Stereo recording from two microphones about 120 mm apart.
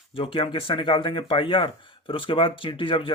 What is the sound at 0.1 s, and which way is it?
Speech, 50° left (ahead or behind).